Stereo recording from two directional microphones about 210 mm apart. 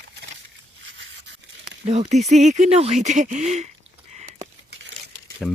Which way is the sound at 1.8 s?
30° right (ahead or behind).